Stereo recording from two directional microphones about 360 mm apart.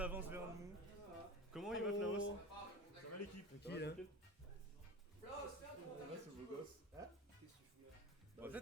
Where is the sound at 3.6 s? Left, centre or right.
Left.